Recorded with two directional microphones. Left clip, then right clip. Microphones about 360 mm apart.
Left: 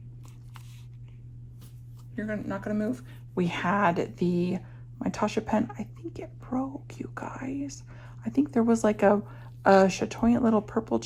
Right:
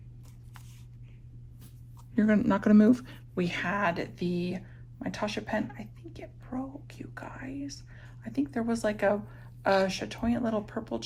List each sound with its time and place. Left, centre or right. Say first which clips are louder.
2.1 s speech: right 7 dB; centre
3.3 s speech: left 3 dB; centre